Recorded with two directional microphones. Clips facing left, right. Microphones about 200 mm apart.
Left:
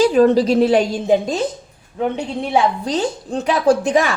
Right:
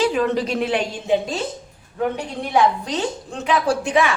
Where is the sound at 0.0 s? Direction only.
40° left (ahead or behind).